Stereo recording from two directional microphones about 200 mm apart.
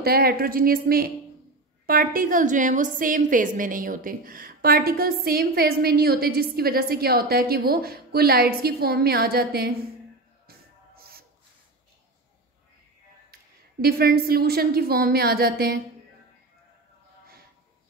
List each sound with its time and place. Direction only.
0.0 s a woman's voice: 50° right (ahead or behind)
10.4 s music: 50° right (ahead or behind)
13.3 s a woman's voice: 50° right (ahead or behind)